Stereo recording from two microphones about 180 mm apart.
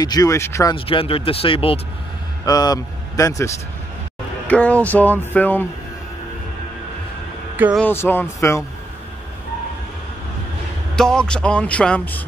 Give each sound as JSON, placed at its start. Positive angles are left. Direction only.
{"t": 0.0, "sound": "speech", "side_deg": 20}
{"t": 0.7, "sound": "speech", "side_deg": 30}
{"t": 2.4, "sound": "speech", "side_deg": 20}
{"t": 7.5, "sound": "speech", "side_deg": -10}
{"t": 7.8, "sound": "speech", "side_deg": 10}
{"t": 11.0, "sound": "speech", "side_deg": 5}